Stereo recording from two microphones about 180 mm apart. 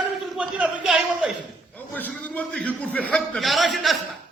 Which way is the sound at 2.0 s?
10° left (ahead or behind).